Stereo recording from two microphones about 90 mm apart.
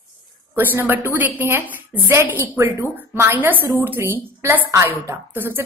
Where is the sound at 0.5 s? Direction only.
25° right (ahead or behind).